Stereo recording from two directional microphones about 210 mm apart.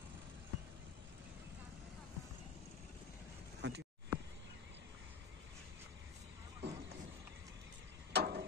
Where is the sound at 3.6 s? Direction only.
55° right (ahead or behind).